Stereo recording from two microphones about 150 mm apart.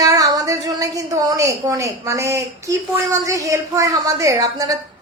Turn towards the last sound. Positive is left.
turn(degrees=-25)  # may be behind; listen again after turning